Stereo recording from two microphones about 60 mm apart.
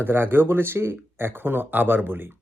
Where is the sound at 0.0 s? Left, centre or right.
Right.